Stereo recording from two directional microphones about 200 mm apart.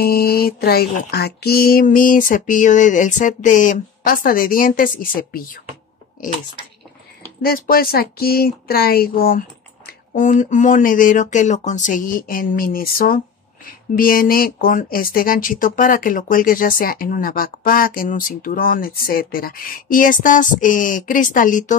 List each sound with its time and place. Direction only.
0.0 s speech: 50° left (ahead or behind)
7.4 s speech: 45° left (ahead or behind)